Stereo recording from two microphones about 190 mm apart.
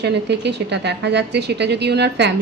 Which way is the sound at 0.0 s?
65° right (ahead or behind).